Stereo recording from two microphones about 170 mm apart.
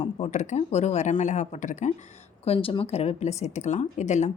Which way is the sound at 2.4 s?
35° left (ahead or behind).